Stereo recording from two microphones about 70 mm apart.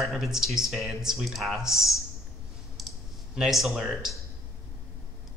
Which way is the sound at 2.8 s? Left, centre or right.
Centre.